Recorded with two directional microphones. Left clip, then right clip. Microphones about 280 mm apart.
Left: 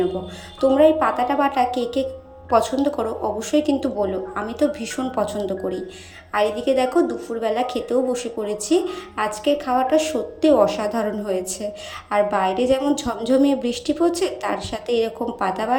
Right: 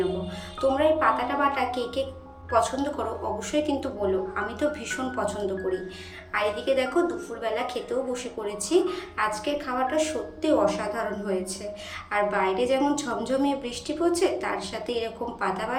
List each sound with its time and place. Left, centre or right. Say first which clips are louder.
0.6 s a woman's voice: left 6 dB; centre